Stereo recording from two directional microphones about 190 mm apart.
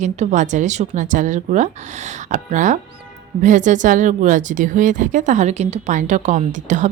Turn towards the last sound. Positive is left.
turn(degrees=-40)  # may be behind; listen again after turning